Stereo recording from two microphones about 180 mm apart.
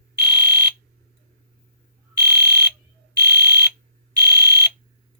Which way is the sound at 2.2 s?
10° right (ahead or behind).